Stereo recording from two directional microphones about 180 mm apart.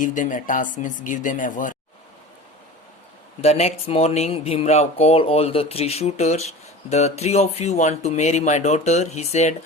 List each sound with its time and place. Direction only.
0.0 s speech: 45° left (ahead or behind)
3.4 s speech: 35° left (ahead or behind)